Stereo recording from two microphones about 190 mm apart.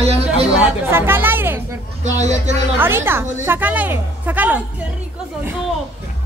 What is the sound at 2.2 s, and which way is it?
Speech, 35° right (ahead or behind).